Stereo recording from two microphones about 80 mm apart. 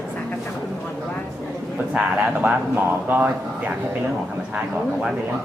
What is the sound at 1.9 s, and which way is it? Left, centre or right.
Speech, centre.